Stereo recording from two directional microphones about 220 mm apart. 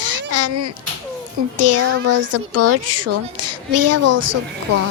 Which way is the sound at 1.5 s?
90° right.